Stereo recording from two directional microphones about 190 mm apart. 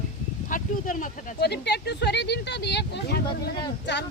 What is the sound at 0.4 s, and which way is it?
Speech, 45° left (ahead or behind).